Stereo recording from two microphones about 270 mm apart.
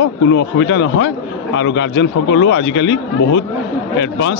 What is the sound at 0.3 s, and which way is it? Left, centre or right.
Speech, left.